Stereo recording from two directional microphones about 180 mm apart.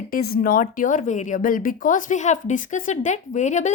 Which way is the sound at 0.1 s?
55° left (ahead or behind).